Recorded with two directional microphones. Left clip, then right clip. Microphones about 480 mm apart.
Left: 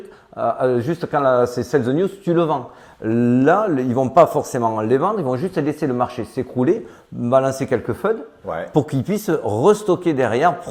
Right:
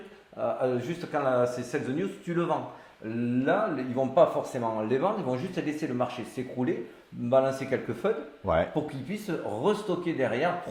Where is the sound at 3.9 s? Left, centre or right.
Left.